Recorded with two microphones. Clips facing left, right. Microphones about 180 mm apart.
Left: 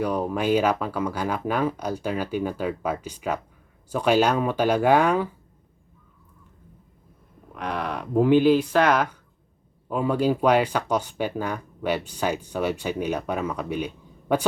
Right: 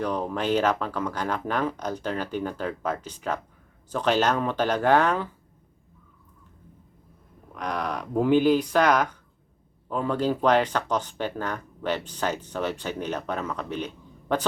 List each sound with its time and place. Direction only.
0.0 s speech: 10° left (ahead or behind)
7.5 s speech: 5° left (ahead or behind)